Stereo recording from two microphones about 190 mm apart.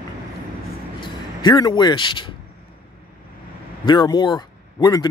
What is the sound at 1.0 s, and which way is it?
Speech, 25° left (ahead or behind).